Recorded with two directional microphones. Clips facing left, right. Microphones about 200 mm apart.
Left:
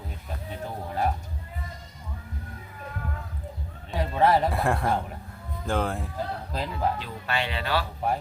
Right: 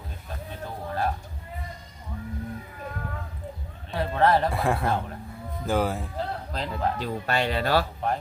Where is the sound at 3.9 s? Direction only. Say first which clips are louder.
Even; 15° left (ahead or behind).